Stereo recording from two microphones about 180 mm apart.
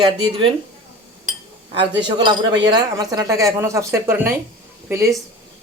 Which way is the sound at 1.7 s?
25° right (ahead or behind).